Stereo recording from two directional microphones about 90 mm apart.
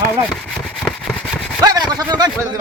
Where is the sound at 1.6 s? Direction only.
50° right (ahead or behind).